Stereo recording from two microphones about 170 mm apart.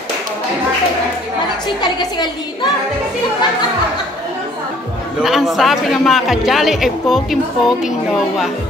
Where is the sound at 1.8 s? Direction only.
25° left (ahead or behind).